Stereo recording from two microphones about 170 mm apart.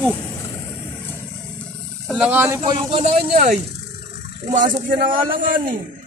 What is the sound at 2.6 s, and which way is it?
Speech, 35° right (ahead or behind).